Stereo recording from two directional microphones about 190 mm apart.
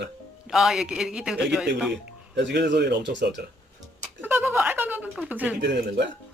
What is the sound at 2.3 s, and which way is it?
Speech, 65° right (ahead or behind).